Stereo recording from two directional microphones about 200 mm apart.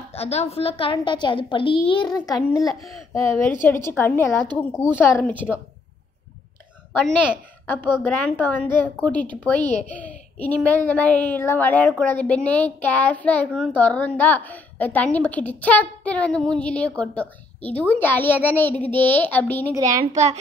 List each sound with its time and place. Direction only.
0.1 s a woman's voice: 30° left (ahead or behind)
2.6 s a child's voice: centre (ahead or behind)
3.2 s a child's voice: 15° left (ahead or behind)
7.6 s a child's voice: 10° left (ahead or behind)
20.1 s a child's voice: 35° right (ahead or behind)